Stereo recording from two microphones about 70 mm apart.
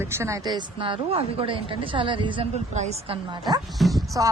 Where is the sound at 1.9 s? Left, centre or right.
Right.